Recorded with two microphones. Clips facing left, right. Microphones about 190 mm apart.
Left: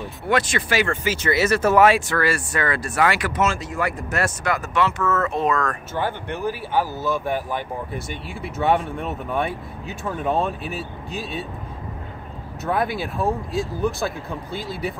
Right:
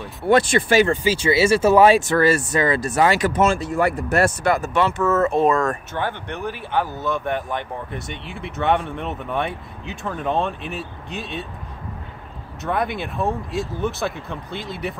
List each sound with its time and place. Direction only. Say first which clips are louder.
0.3 s speech: right 6 dB; 30° right (ahead or behind)
5.9 s speech: left 1 dB; 5° left (ahead or behind)
12.6 s speech: even; 5° left (ahead or behind)